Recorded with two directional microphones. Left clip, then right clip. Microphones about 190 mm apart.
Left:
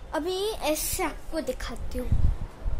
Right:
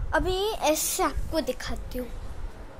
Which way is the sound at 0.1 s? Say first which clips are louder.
Right 3 dB; 5° left (ahead or behind).